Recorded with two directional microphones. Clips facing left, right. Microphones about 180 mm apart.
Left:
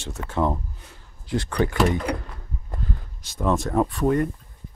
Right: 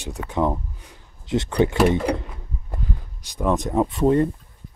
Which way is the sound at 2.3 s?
10° right (ahead or behind).